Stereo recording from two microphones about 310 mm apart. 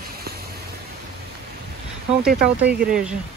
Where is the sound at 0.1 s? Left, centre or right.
Right.